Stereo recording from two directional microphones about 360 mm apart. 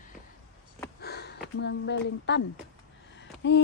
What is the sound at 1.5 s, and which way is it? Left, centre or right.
Speech, left.